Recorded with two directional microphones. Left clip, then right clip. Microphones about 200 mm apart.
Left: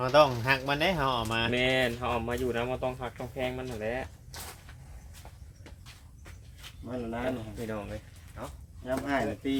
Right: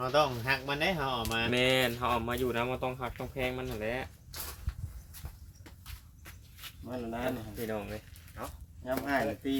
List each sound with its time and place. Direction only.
0.0 s speech: 25° left (ahead or behind)
1.5 s speech: 40° right (ahead or behind)
6.8 s speech: 5° right (ahead or behind)
7.7 s a sound: 35° right (ahead or behind)
9.0 s speech: 5° right (ahead or behind)